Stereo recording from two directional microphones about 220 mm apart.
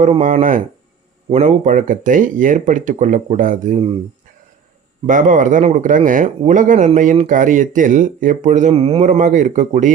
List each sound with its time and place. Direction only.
0.0 s speech: 35° right (ahead or behind)
5.0 s speech: 35° right (ahead or behind)